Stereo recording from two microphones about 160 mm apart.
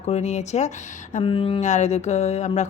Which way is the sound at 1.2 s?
35° left (ahead or behind).